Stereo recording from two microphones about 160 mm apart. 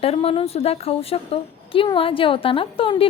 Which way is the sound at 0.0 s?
40° left (ahead or behind).